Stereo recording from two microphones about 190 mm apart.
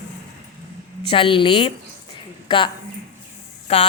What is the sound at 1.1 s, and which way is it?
Speech, 25° left (ahead or behind).